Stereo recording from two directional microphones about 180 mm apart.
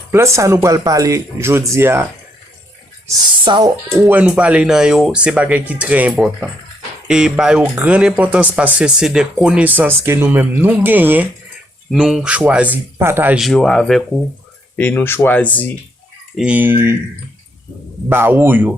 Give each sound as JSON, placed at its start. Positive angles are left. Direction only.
{"t": 0.1, "sound": "speech", "side_deg": -15}
{"t": 3.1, "sound": "speech", "side_deg": -25}
{"t": 3.9, "sound": "speech", "side_deg": -5}
{"t": 16.4, "sound": "speech", "side_deg": -10}
{"t": 18.1, "sound": "speech", "side_deg": -10}